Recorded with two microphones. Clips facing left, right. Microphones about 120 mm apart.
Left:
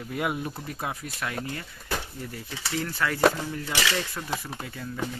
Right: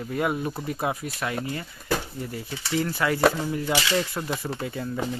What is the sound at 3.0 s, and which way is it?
Speech, 15° right (ahead or behind).